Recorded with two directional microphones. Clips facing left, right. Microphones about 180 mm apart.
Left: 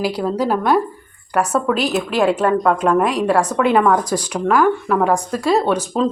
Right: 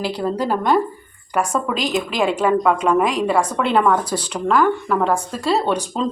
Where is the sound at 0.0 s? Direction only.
5° left (ahead or behind).